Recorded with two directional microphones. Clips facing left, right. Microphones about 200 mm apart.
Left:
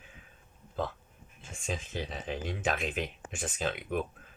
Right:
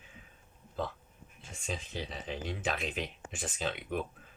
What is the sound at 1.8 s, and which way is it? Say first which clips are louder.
Speech: left 3 dB; 50° left (ahead or behind).